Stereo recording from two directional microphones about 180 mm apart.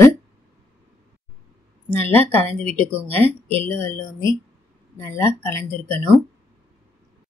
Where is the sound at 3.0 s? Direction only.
35° right (ahead or behind).